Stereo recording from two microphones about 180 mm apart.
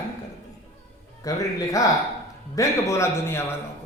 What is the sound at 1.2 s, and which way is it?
Speech, 20° left (ahead or behind).